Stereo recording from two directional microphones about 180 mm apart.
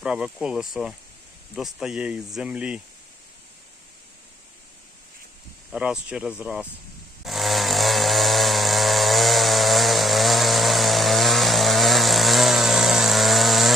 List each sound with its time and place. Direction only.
0.0 s speech: 5° right (ahead or behind)
5.7 s speech: 5° right (ahead or behind)
7.3 s chainsaw: centre (ahead or behind)